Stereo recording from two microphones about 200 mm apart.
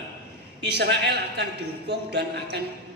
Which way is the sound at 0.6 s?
55° right (ahead or behind).